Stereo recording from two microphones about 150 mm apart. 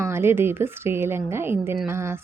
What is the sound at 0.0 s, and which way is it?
A woman's voice, 15° right (ahead or behind).